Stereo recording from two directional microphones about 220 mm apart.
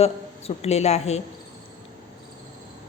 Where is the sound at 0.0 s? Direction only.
30° left (ahead or behind).